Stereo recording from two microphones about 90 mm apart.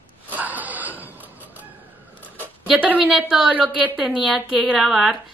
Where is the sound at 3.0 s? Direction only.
5° right (ahead or behind).